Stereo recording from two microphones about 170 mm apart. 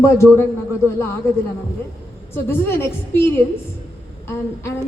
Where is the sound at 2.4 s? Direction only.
15° left (ahead or behind).